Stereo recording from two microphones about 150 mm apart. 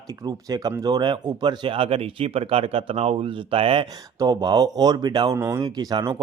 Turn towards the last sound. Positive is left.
turn(degrees=-25)  # may be behind; listen again after turning